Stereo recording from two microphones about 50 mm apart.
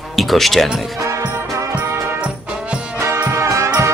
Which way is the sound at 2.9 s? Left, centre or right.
Right.